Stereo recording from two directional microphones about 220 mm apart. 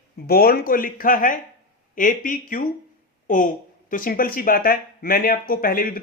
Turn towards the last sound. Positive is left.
turn(degrees=40)  # may be behind; listen again after turning